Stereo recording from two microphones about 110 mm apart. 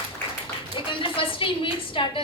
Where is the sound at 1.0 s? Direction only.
55° left (ahead or behind).